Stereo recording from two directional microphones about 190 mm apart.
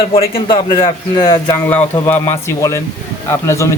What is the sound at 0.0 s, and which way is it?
Speech, 30° left (ahead or behind).